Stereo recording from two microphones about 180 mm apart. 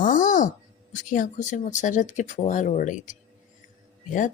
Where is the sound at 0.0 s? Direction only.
45° left (ahead or behind).